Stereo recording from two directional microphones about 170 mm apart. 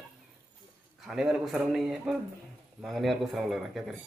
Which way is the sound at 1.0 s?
Centre (ahead or behind).